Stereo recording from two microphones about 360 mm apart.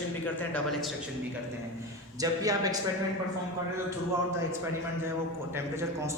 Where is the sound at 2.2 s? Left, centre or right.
Centre.